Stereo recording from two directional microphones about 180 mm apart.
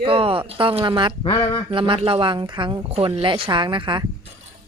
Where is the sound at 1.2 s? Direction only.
25° left (ahead or behind).